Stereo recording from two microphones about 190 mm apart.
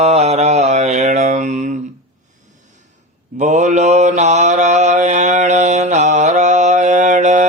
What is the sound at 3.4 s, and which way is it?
Mantra, 40° right (ahead or behind).